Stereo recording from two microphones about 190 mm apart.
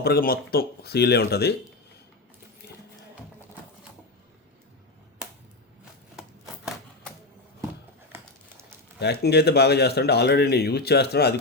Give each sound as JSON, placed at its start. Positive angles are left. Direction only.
{"t": 0.0, "sound": "speech", "side_deg": 55}
{"t": 9.2, "sound": "speech", "side_deg": 60}